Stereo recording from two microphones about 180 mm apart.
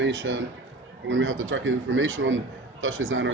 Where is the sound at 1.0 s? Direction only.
90° right.